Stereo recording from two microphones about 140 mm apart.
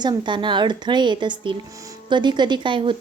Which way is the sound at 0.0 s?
30° right (ahead or behind).